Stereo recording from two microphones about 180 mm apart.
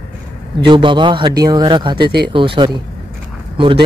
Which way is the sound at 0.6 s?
25° right (ahead or behind).